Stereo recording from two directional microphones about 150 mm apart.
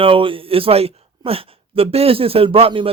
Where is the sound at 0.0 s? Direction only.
35° right (ahead or behind).